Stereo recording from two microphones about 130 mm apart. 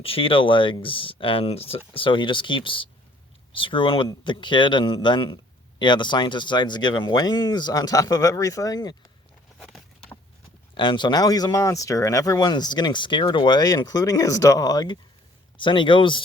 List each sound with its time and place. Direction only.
0.0 s speech: 45° left (ahead or behind)
9.6 s a sound: centre (ahead or behind)
10.8 s speech: 35° left (ahead or behind)